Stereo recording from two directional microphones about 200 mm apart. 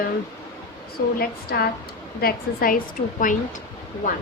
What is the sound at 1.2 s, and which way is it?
A woman's voice, 50° left (ahead or behind).